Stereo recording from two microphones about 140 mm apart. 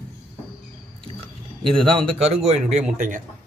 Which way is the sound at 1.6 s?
40° right (ahead or behind).